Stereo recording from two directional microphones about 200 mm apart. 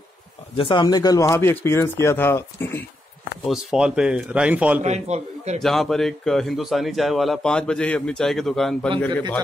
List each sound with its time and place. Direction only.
0.6 s speech: 25° left (ahead or behind)
3.4 s a man's voice: 5° right (ahead or behind)
4.8 s a man's voice: 35° right (ahead or behind)
5.6 s a man's voice: centre (ahead or behind)